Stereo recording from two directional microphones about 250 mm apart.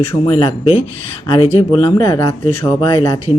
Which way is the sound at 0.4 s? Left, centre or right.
Left.